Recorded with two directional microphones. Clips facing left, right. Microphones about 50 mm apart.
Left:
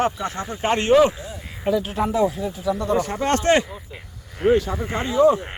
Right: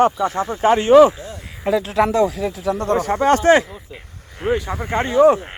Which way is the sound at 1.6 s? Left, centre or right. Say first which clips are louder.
Right 4 dB; right.